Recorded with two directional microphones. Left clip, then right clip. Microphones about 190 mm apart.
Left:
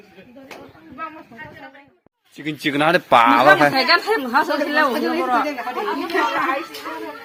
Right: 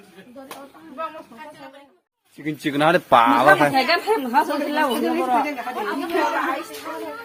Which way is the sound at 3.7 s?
40° right (ahead or behind).